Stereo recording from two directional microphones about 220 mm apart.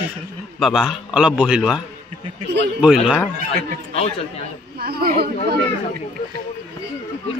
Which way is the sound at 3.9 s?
25° left (ahead or behind).